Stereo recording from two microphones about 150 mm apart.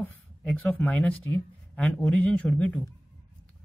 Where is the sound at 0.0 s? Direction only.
10° left (ahead or behind).